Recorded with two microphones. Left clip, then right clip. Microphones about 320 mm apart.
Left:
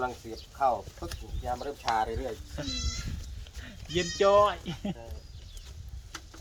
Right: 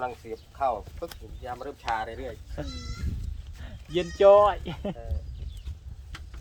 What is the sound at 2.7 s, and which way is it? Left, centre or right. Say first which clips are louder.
Speech: left 7 dB; centre.